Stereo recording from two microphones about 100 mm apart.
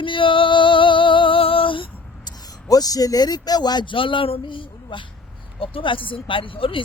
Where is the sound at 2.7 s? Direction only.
40° left (ahead or behind).